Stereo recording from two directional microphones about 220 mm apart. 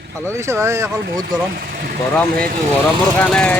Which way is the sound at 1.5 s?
45° right (ahead or behind).